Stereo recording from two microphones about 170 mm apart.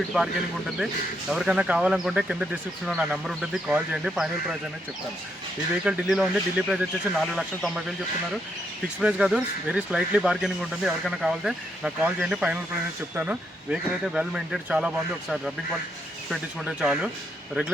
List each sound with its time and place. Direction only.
0.1 s speech: 5° right (ahead or behind)
5.8 s speech: 5° right (ahead or behind)
9.0 s speech: 5° right (ahead or behind)